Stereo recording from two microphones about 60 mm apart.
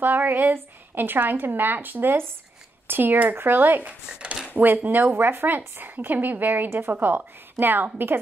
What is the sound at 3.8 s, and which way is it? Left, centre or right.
Speech, centre.